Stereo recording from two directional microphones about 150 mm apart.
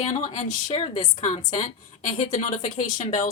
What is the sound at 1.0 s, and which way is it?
Speech, 50° left (ahead or behind).